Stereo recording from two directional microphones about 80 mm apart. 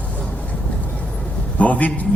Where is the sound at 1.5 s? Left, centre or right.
Centre.